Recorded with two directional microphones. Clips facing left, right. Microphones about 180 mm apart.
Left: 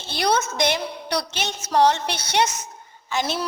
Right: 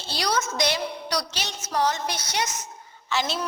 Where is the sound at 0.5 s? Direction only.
55° left (ahead or behind).